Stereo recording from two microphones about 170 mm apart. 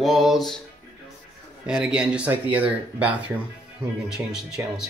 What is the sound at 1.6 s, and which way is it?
Speech, 5° right (ahead or behind).